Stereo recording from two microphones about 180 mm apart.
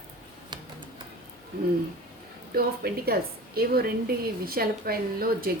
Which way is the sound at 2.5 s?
60° right (ahead or behind).